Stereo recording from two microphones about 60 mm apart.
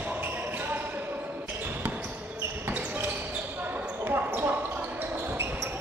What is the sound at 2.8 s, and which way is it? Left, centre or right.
Basketball bounce, right.